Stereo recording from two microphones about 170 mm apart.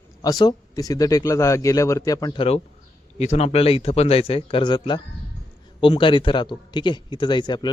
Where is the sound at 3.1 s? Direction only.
40° left (ahead or behind).